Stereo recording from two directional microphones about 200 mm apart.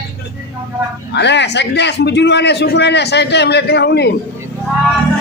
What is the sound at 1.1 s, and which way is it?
A man's voice, 60° left (ahead or behind).